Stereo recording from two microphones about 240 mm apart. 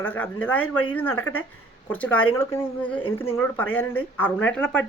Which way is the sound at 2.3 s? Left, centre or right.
Centre.